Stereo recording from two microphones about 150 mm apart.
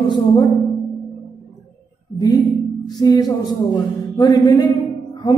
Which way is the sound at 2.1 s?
25° left (ahead or behind).